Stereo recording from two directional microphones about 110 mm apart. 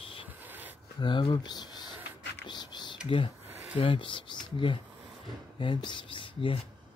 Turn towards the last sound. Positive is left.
turn(degrees=50)  # may be behind; listen again after turning